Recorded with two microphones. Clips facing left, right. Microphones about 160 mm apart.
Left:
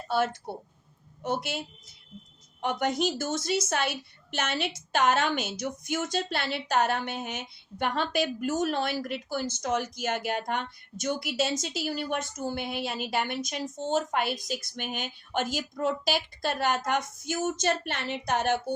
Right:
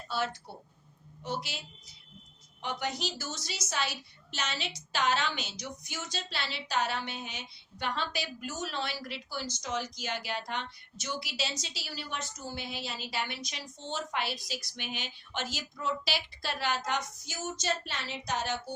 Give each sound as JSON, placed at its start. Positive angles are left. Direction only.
{"t": 0.1, "sound": "a woman's voice", "side_deg": 55}